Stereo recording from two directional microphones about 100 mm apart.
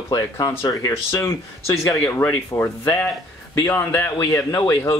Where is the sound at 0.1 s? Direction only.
40° left (ahead or behind).